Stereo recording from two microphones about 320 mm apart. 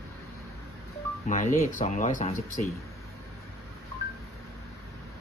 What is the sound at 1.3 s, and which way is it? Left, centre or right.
Speech, left.